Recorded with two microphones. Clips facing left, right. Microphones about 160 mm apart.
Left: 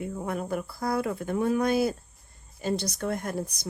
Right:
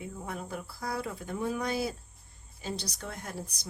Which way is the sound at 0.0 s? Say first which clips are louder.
Left 7 dB; 60° left (ahead or behind).